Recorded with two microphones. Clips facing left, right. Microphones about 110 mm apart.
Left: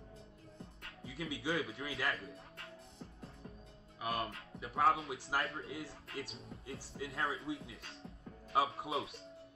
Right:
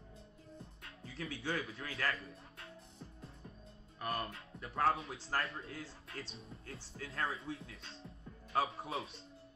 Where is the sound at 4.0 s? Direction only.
Centre (ahead or behind).